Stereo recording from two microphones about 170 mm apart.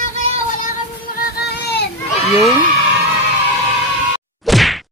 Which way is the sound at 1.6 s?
75° left (ahead or behind).